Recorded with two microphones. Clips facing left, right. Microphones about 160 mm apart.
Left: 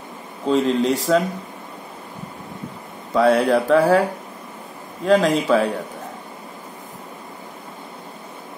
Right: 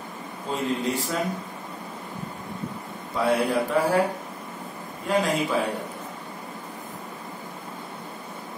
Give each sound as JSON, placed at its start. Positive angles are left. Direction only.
{"t": 0.5, "sound": "speech", "side_deg": 90}
{"t": 3.2, "sound": "speech", "side_deg": 90}
{"t": 5.0, "sound": "speech", "side_deg": 90}